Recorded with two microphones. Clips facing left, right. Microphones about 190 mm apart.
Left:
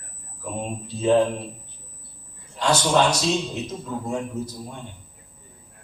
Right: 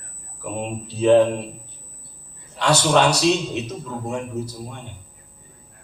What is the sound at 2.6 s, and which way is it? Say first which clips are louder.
A man's voice: right 2 dB; 65° right (ahead or behind).